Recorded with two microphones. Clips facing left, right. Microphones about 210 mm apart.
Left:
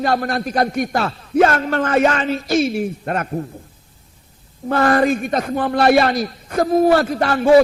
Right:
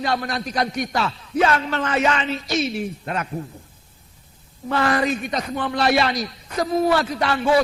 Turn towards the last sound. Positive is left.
turn(degrees=50)  # may be behind; listen again after turning